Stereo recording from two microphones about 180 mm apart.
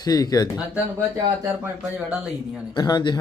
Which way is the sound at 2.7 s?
25° left (ahead or behind).